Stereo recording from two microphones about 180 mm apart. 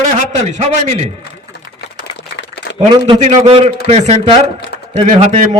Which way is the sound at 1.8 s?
65° left (ahead or behind).